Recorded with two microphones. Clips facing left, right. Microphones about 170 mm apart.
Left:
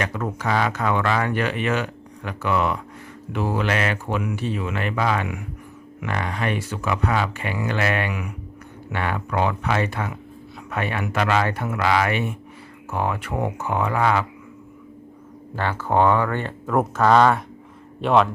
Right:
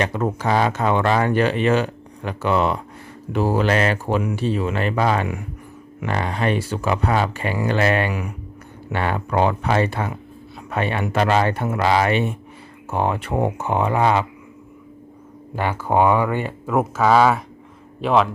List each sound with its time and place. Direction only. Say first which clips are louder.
0.0 s speech: right 4 dB; 30° right (ahead or behind)
15.5 s a man's voice: right 2 dB; 15° right (ahead or behind)